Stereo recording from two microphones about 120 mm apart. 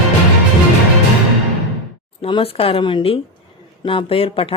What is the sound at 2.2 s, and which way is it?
Speech, 50° left (ahead or behind).